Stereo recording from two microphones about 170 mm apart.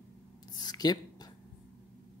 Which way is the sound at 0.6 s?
25° left (ahead or behind).